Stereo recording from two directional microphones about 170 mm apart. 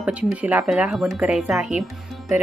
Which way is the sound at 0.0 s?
5° right (ahead or behind).